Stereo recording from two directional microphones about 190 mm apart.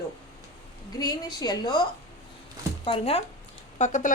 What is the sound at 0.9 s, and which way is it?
Speech, 20° left (ahead or behind).